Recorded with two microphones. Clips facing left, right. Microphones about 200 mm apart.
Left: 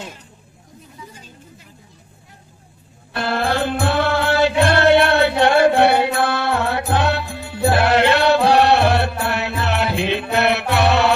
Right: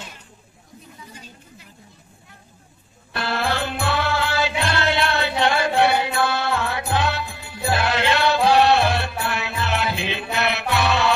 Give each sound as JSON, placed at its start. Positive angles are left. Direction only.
{"t": 3.2, "sound": "music", "side_deg": 50}